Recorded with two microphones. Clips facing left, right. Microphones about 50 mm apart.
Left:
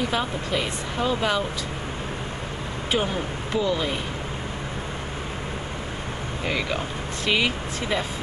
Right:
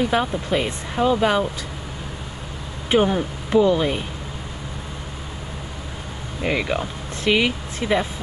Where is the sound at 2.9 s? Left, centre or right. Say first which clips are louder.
Right 7 dB; right.